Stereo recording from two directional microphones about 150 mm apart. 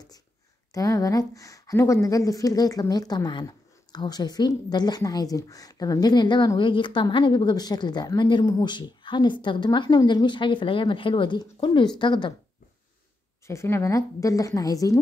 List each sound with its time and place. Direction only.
0.7 s speech: 20° left (ahead or behind)
13.5 s speech: 15° left (ahead or behind)